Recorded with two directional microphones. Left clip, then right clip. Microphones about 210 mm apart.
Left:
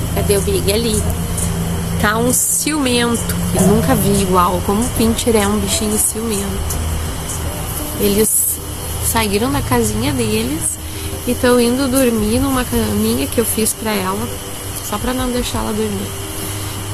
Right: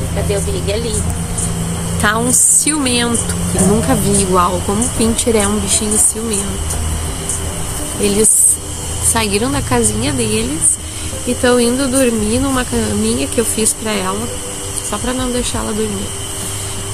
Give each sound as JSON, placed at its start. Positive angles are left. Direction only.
{"t": 0.7, "sound": "speech", "side_deg": 45}
{"t": 2.0, "sound": "speech", "side_deg": -5}
{"t": 8.0, "sound": "speech", "side_deg": 0}